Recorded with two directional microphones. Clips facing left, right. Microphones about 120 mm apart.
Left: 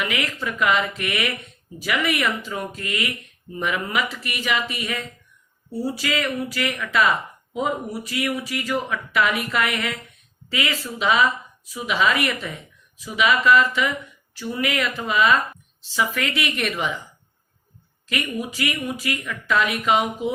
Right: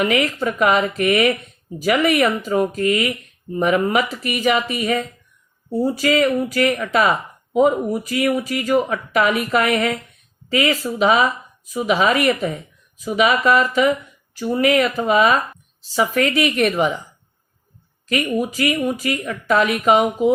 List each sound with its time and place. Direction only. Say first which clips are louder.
0.0 s speech: right 8 dB; 40° right (ahead or behind)
18.3 s speech: right 7 dB; 40° right (ahead or behind)